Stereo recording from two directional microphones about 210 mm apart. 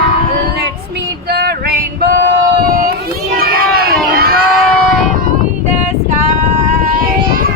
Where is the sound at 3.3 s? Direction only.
45° right (ahead or behind).